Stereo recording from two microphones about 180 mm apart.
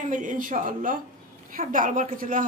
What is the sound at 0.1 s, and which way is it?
Speech, 45° right (ahead or behind).